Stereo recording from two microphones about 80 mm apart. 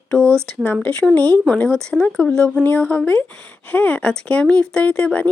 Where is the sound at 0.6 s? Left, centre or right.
Centre.